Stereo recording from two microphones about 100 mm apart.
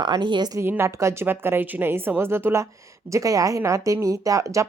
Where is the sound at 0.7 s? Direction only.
30° right (ahead or behind).